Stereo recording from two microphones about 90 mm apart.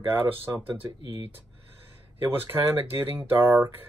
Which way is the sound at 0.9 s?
50° right (ahead or behind).